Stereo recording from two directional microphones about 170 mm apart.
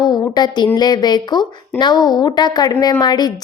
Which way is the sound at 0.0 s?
25° left (ahead or behind).